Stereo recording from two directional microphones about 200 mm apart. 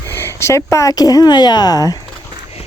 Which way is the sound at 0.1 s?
10° left (ahead or behind).